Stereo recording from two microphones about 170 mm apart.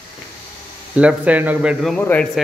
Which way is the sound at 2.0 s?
10° left (ahead or behind).